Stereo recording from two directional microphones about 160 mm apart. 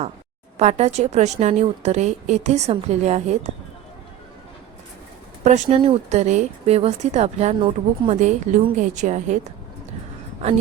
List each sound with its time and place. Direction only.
0.5 s speech: 45° right (ahead or behind)
5.4 s speech: 45° right (ahead or behind)